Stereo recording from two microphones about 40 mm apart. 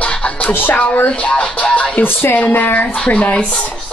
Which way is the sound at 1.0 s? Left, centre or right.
Left.